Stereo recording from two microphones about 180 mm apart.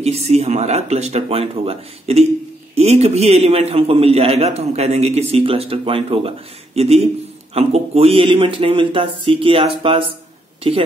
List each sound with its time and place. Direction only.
0.0 s a man's voice: 35° right (ahead or behind)